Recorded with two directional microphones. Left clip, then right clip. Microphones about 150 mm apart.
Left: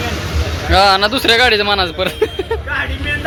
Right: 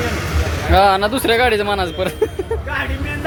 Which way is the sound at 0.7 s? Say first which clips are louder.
Left 2 dB; 20° right (ahead or behind).